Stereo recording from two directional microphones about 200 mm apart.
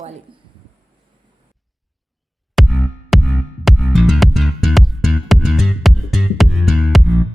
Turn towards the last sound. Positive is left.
turn(degrees=0)  # may be behind; listen again after turning